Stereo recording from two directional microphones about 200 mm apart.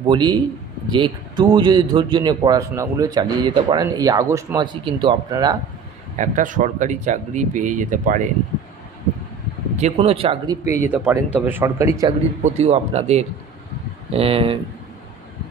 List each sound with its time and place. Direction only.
0.0 s a man's voice: 20° right (ahead or behind)
6.1 s speech: 40° right (ahead or behind)
9.8 s a man's voice: 35° right (ahead or behind)
10.7 s speech: 10° right (ahead or behind)
12.4 s a man's voice: 30° right (ahead or behind)